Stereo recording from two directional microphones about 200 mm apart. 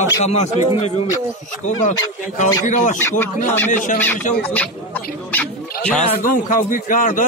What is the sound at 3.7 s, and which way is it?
Speech, 40° left (ahead or behind).